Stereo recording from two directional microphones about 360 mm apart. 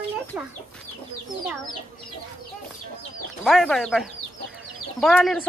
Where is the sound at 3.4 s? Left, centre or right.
Centre.